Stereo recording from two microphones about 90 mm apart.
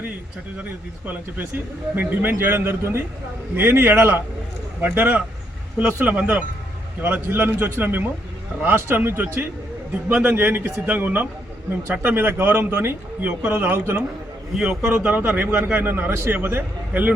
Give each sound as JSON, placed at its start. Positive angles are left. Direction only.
{"t": 0.5, "sound": "a man's voice", "side_deg": -20}